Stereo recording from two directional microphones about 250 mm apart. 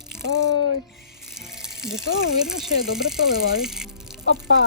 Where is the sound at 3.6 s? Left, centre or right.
Centre.